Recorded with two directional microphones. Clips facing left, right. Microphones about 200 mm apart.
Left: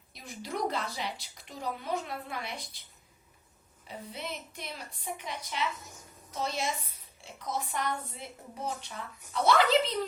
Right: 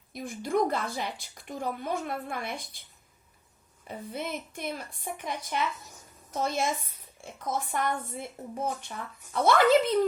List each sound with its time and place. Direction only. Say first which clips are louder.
0.1 s a woman's voice: right 9 dB; 50° right (ahead or behind)
3.8 s a woman's voice: right 5 dB; 50° right (ahead or behind)